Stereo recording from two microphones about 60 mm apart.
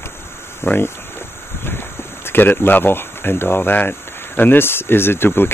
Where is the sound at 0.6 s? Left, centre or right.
Left.